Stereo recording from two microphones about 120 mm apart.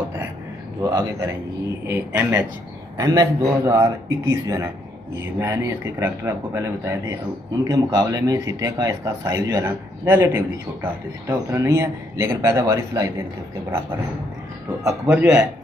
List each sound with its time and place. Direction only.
0.8 s speech: 25° right (ahead or behind)
1.9 s speech: 15° right (ahead or behind)
3.0 s speech: 30° right (ahead or behind)
15.0 s speech: 10° right (ahead or behind)